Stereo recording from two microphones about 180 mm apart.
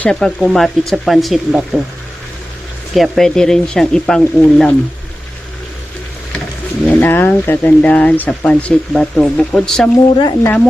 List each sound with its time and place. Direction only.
0.0 s speech: 5° left (ahead or behind)
2.9 s speech: centre (ahead or behind)
6.8 s speech: 10° left (ahead or behind)
10.2 s speech: 25° left (ahead or behind)